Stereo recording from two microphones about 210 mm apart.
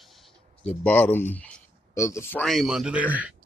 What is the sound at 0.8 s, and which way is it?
Speech, 10° left (ahead or behind).